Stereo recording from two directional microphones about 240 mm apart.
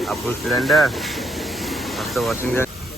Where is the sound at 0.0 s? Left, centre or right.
Centre.